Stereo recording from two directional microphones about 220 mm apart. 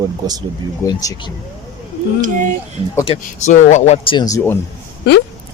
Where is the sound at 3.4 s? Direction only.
35° left (ahead or behind); by 4.5 s 15° left (ahead or behind).